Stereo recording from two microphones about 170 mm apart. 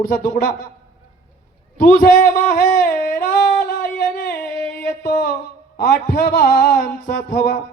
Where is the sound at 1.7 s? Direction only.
50° left (ahead or behind).